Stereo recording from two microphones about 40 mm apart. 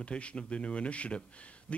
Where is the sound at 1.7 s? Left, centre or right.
Left.